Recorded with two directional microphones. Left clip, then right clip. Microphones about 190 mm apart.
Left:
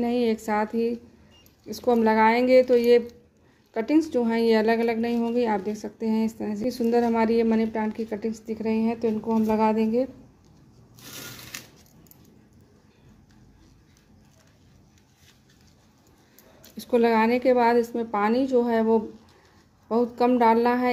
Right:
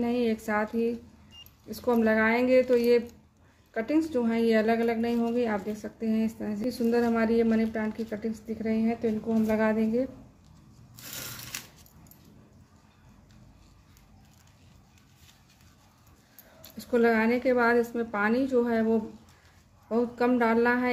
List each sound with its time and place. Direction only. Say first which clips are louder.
0.0 s a woman's voice: left 4 dB; 30° left (ahead or behind)
16.7 s a woman's voice: left 3 dB; 30° left (ahead or behind)